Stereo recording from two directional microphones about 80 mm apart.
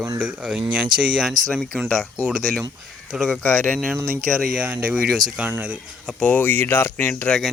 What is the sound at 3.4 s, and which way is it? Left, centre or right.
Speech, centre.